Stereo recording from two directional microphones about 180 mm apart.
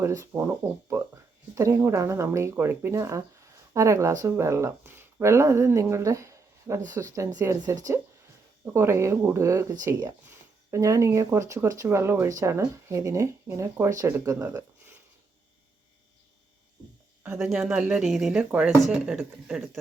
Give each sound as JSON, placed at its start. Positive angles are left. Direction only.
{"t": 0.0, "sound": "speech", "side_deg": -15}
{"t": 17.2, "sound": "speech", "side_deg": -5}